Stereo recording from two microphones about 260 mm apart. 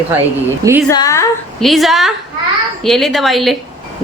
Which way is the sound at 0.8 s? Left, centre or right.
Centre.